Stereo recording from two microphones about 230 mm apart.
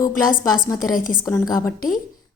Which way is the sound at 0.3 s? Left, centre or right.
Left.